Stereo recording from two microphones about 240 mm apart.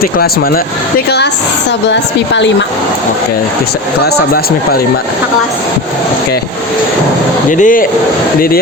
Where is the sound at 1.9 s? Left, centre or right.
Left.